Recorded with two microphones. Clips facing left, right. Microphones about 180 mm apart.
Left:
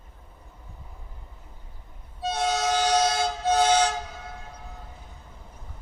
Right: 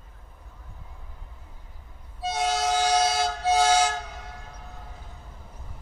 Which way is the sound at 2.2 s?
5° right (ahead or behind).